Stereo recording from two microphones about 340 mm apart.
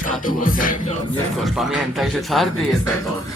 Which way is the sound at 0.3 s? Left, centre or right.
Left.